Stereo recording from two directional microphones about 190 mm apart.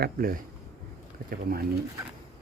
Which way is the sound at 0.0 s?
50° right (ahead or behind).